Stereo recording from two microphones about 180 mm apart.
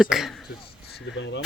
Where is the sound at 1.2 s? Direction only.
90° left.